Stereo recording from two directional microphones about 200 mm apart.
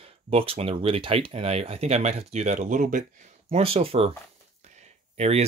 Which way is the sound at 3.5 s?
30° right (ahead or behind).